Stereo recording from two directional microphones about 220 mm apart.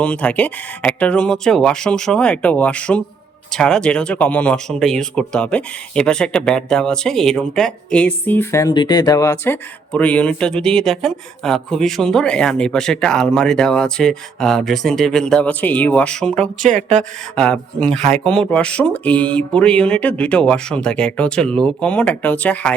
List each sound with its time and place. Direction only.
0.0 s speech: 5° left (ahead or behind)
16.6 s speech: 35° right (ahead or behind)
17.0 s speech: 5° left (ahead or behind)